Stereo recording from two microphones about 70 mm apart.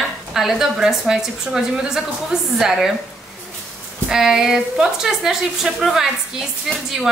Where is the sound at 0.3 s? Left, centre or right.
Centre.